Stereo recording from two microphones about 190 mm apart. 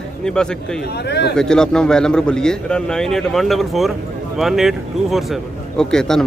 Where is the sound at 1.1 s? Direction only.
60° left (ahead or behind).